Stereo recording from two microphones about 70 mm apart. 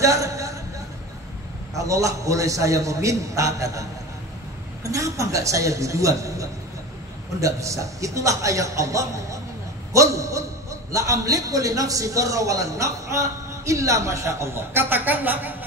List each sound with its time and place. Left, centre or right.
0.0 s a man's voice: right
1.8 s a man's voice: right
4.8 s a man's voice: right